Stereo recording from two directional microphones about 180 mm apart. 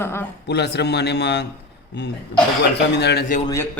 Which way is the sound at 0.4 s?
70° left (ahead or behind).